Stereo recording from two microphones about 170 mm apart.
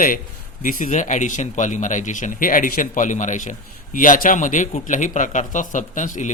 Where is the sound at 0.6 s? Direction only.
50° left (ahead or behind).